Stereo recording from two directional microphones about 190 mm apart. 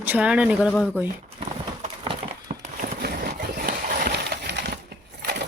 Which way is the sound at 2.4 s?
45° right (ahead or behind).